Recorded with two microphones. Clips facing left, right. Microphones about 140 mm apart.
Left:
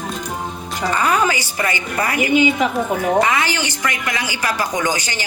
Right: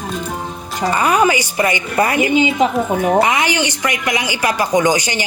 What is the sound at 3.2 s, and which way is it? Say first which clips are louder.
A woman's voice: right 2 dB; 20° right (ahead or behind).